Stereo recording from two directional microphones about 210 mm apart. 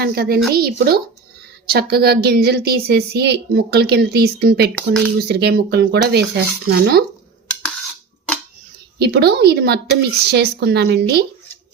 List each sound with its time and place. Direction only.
0.0 s speech: 50° right (ahead or behind)
9.0 s speech: 50° right (ahead or behind)